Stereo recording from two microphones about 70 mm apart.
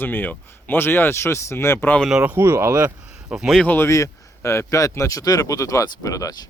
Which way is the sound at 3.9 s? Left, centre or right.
Left.